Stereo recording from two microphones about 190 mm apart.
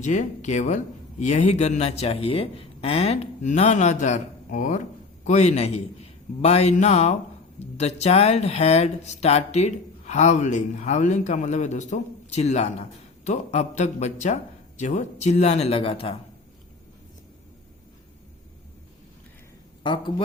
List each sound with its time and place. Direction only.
0.0 s speech: 40° left (ahead or behind)
19.8 s speech: 25° left (ahead or behind)